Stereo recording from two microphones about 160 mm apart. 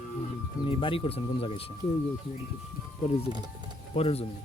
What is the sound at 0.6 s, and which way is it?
Speech, 35° left (ahead or behind).